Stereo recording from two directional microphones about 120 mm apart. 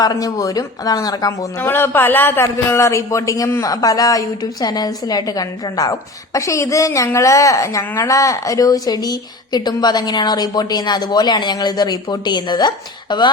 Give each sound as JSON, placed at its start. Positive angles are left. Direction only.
{"t": 0.0, "sound": "speech", "side_deg": 30}
{"t": 1.5, "sound": "a man's voice", "side_deg": 20}